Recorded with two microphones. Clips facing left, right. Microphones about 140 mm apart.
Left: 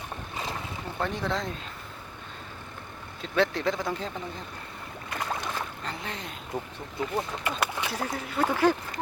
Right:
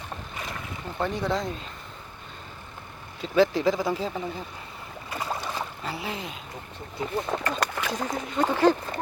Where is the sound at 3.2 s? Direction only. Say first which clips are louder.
Right 5 dB; centre (ahead or behind).